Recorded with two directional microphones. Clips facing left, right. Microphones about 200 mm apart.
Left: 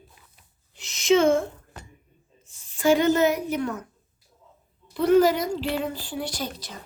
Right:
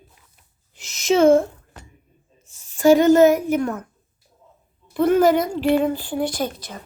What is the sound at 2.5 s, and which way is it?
A woman's voice, 45° right (ahead or behind).